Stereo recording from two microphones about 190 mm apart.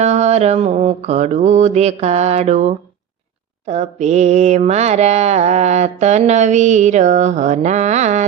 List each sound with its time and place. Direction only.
0.0 s mantra: 35° right (ahead or behind)